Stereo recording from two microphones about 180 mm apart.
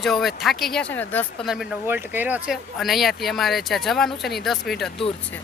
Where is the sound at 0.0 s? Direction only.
Centre (ahead or behind).